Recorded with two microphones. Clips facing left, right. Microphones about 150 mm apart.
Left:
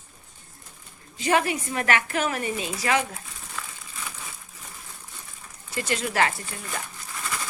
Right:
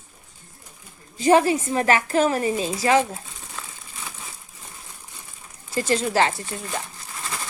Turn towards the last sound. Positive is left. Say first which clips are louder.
# right 1 dB
turn(degrees=-25)  # may be behind; listen again after turning